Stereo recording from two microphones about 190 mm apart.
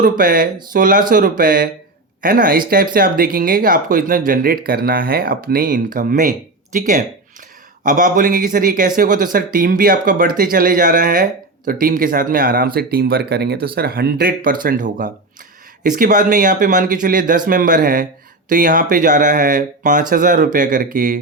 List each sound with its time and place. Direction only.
0.0 s speech: 50° right (ahead or behind)